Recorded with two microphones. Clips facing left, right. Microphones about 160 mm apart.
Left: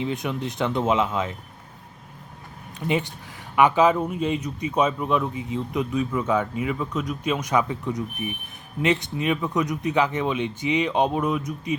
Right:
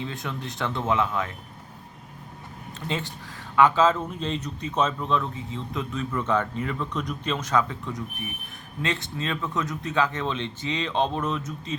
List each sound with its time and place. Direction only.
0.0 s speech: 20° left (ahead or behind)
2.8 s a man's voice: 15° left (ahead or behind)